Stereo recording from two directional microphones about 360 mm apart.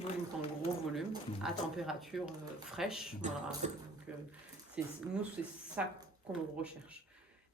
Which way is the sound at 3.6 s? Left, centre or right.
Centre.